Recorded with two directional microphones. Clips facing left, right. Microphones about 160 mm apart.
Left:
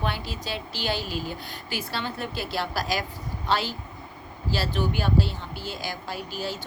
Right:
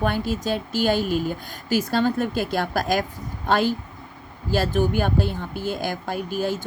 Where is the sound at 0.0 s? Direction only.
50° right (ahead or behind).